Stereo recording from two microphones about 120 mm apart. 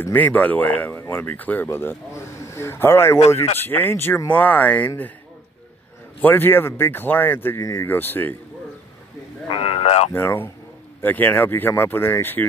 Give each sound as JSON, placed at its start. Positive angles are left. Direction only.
{"t": 0.0, "sound": "a man's voice", "side_deg": 15}
{"t": 6.2, "sound": "speech", "side_deg": 15}
{"t": 9.5, "sound": "speech", "side_deg": 50}
{"t": 10.1, "sound": "speech", "side_deg": 15}